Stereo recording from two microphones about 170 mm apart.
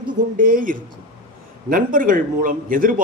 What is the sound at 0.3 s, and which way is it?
Speech, 55° right (ahead or behind).